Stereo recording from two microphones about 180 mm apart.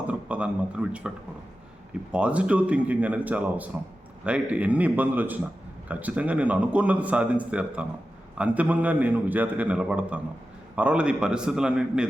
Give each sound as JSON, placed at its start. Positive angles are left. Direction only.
{"t": 0.1, "sound": "speech", "side_deg": -5}
{"t": 2.1, "sound": "a man's voice", "side_deg": -5}